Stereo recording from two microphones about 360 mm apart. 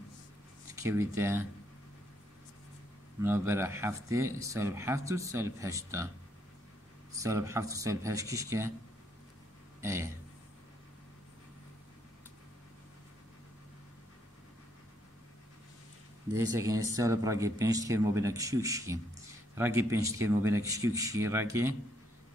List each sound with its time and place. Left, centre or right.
0.7 s speech: centre
3.2 s speech: centre
7.1 s speech: centre
9.8 s a sound: centre
16.3 s speech: centre